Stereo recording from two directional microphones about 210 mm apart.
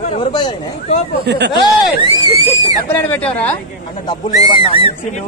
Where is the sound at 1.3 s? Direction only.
55° right (ahead or behind).